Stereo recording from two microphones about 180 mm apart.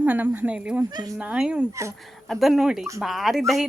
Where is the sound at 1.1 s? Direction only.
5° right (ahead or behind).